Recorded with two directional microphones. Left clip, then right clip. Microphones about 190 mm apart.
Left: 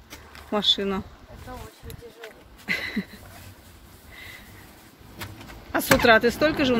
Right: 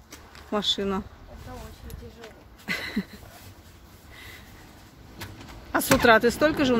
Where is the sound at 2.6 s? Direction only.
15° right (ahead or behind).